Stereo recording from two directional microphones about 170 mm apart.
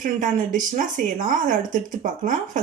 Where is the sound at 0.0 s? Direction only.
50° right (ahead or behind).